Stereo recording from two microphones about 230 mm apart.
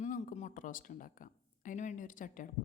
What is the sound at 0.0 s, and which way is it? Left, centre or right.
A woman's voice, left.